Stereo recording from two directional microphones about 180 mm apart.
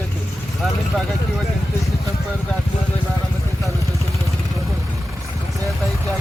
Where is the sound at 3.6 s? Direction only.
15° right (ahead or behind).